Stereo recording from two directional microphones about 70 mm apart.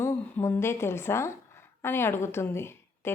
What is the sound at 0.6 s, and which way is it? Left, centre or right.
A woman's voice, left.